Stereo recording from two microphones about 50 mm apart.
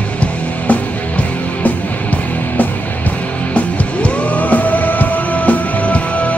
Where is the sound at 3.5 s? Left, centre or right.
Left.